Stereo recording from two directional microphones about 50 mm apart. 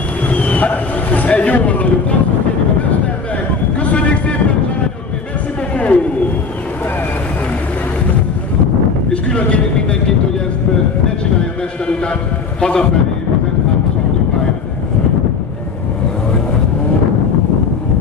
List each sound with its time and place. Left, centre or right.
0.3 s vehicle: left
3.8 s vehicle: left
5.8 s a sound: left
9.1 s vehicle: left
12.5 s a man's voice: centre